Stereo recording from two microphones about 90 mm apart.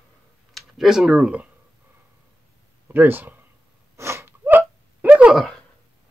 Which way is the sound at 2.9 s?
20° right (ahead or behind).